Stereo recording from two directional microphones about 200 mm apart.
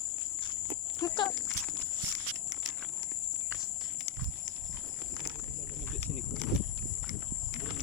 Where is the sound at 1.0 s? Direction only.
25° left (ahead or behind).